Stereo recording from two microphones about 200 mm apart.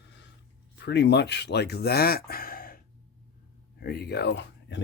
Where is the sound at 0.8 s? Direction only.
60° left (ahead or behind).